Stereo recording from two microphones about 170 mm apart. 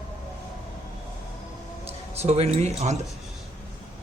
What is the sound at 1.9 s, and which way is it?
Speech, 40° right (ahead or behind).